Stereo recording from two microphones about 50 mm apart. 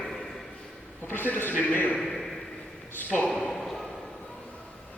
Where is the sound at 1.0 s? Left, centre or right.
Left.